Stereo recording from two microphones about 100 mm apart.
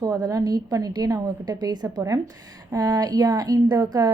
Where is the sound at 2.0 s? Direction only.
30° right (ahead or behind).